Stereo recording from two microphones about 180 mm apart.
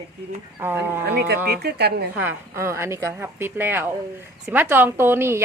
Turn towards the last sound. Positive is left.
turn(degrees=-15)  # may be behind; listen again after turning